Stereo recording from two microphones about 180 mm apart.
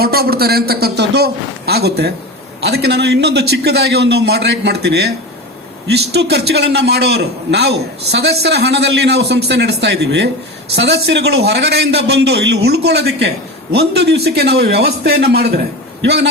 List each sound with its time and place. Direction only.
0.0 s a man's voice: 60° right (ahead or behind)
6.3 s a man's voice: 65° right (ahead or behind)